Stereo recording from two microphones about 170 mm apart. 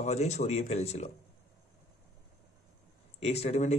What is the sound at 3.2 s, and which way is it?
Speech, 40° left (ahead or behind).